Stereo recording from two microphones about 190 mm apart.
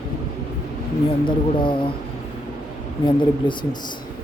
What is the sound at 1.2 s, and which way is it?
Speech, 25° left (ahead or behind).